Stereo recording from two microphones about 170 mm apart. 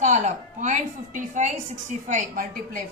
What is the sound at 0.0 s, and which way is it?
A woman's voice, 45° right (ahead or behind).